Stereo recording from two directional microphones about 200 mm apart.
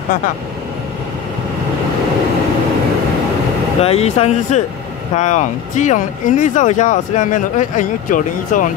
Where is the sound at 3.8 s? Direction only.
30° left (ahead or behind).